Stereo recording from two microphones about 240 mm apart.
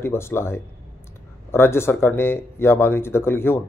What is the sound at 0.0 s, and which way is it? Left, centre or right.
Speech, centre.